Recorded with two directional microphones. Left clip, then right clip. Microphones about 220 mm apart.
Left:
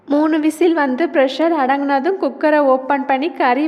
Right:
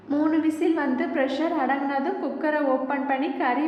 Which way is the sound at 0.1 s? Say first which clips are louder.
Left 8 dB; 40° left (ahead or behind).